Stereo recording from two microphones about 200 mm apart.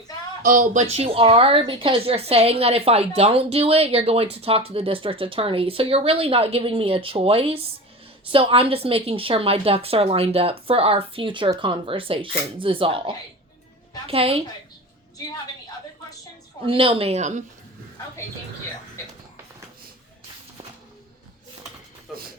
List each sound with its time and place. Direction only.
0.4 s a woman's voice: 40° right (ahead or behind)
16.6 s a woman's voice: 25° right (ahead or behind)